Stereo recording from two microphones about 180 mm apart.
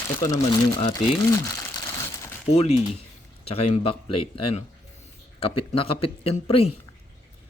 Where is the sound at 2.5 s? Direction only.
35° left (ahead or behind).